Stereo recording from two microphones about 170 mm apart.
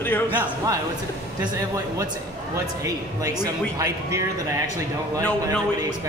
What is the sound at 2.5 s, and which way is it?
Speech, 20° right (ahead or behind).